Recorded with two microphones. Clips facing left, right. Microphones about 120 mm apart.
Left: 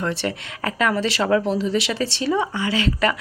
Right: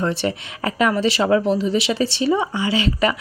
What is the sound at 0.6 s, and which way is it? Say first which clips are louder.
Speech: right 3 dB; 15° right (ahead or behind).